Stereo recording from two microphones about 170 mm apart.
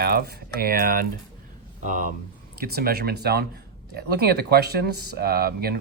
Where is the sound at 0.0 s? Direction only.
65° right (ahead or behind); by 2.0 s 50° right (ahead or behind).